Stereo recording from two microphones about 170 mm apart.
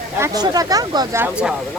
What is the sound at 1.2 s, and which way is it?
Speech, 5° right (ahead or behind).